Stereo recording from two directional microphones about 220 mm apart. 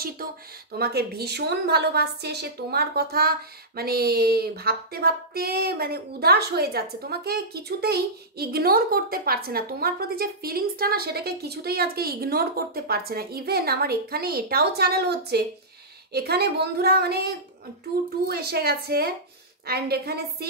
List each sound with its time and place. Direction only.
0.7 s a woman's voice: 45° right (ahead or behind)